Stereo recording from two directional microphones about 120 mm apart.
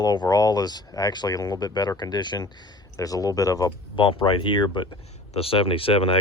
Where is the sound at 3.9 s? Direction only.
45° left (ahead or behind).